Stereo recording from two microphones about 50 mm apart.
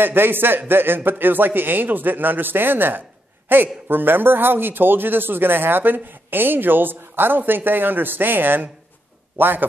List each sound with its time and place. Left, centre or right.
0.0 s a man's voice: right